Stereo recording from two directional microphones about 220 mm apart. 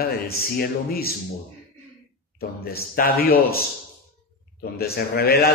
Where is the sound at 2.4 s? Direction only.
45° left (ahead or behind).